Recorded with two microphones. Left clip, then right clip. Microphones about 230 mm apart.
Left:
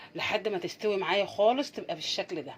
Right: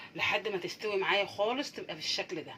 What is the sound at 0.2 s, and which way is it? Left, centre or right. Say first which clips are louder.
Speech: left 1 dB; left.